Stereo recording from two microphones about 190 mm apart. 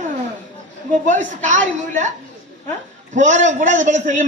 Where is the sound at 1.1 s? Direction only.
40° right (ahead or behind).